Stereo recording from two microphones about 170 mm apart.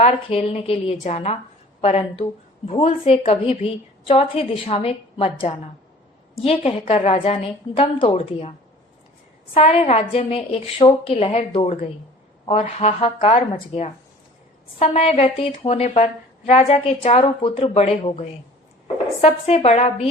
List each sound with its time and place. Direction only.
0.0 s a woman's voice: 35° left (ahead or behind)
9.6 s a woman's voice: 35° left (ahead or behind)